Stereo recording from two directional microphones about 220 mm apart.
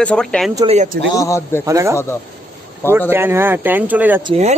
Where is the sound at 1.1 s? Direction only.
15° left (ahead or behind).